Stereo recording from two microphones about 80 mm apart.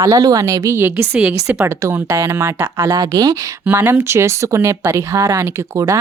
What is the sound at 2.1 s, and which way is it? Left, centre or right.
Speech, right.